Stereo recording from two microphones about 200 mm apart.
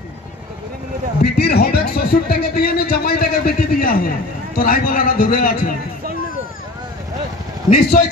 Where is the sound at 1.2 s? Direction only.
50° left (ahead or behind).